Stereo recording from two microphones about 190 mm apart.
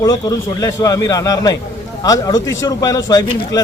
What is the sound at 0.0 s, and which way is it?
Speech, 20° left (ahead or behind).